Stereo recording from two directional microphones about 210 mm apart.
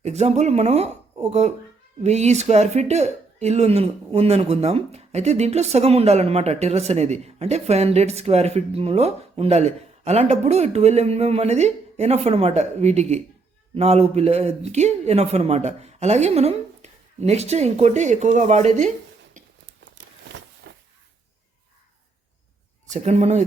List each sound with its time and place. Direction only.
0.0 s a woman's voice: 30° right (ahead or behind)
19.8 s a sound: 60° right (ahead or behind)
22.9 s a woman's voice: 35° right (ahead or behind)